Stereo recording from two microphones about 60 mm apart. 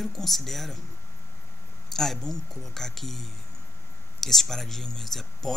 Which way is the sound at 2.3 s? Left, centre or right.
Left.